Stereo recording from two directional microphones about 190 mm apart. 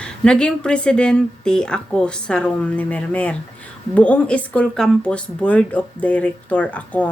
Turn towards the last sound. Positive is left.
turn(degrees=5)  # may be behind; listen again after turning